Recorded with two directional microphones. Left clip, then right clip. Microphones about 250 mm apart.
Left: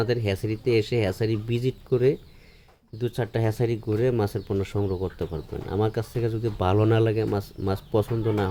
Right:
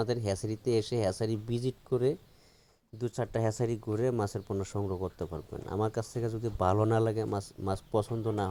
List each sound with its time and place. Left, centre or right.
0.0 s speech: right